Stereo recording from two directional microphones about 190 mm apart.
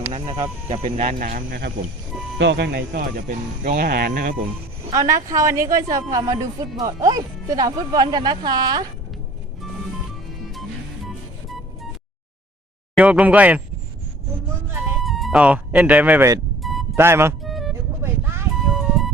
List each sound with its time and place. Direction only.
0.1 s speech: 20° right (ahead or behind); by 1.7 s 55° right (ahead or behind)
2.4 s speech: 65° right (ahead or behind)
3.2 s speech: 45° right (ahead or behind)
4.9 s a woman's voice: 15° right (ahead or behind)
11.4 s music: centre (ahead or behind)
13.0 s speech: 5° right (ahead or behind)
15.0 s speech: centre (ahead or behind)
16.6 s music: centre (ahead or behind)
16.9 s speech: 15° right (ahead or behind)
17.4 s music: centre (ahead or behind)
18.0 s a sound: 15° right (ahead or behind)
18.7 s music: centre (ahead or behind)